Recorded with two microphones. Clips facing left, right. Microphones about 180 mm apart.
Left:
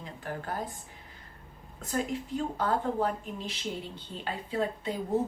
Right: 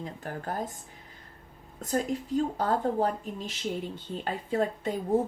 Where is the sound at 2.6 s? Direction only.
40° right (ahead or behind).